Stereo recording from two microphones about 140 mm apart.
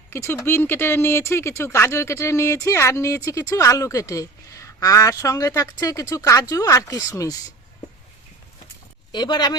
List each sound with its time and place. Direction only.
0.1 s speech: 20° left (ahead or behind)
9.1 s speech: 30° left (ahead or behind)